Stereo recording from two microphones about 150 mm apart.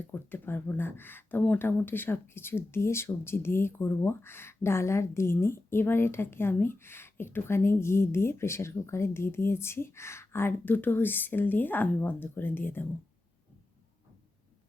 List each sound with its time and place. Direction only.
0.1 s speech: 15° left (ahead or behind)